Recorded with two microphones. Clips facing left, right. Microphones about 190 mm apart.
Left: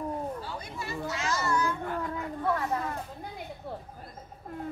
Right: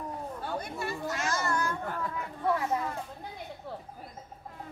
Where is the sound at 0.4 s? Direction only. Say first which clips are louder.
Right 3 dB; 55° right (ahead or behind).